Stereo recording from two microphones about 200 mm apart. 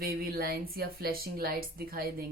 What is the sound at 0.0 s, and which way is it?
Speech, 45° right (ahead or behind).